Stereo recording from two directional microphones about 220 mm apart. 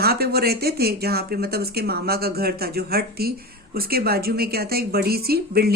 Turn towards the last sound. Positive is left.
turn(degrees=-45)  # may be behind; listen again after turning